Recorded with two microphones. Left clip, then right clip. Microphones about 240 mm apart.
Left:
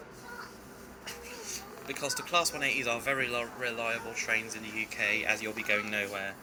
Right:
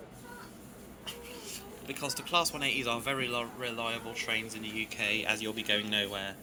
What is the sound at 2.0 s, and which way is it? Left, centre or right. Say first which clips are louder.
Speech: left 1 dB; right.